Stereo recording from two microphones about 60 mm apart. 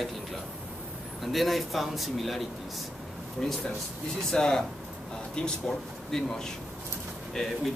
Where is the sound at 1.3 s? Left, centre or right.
Centre.